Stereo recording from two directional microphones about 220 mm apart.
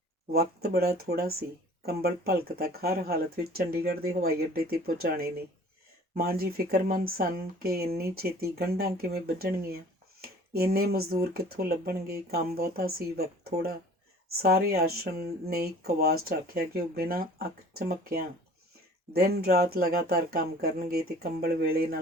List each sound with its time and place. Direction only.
0.3 s speech: 45° right (ahead or behind)